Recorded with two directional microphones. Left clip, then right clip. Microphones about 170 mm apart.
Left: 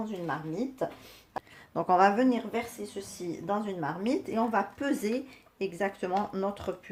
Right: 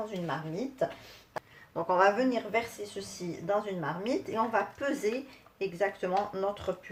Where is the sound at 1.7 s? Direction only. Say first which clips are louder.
Left 2 dB; 65° left (ahead or behind).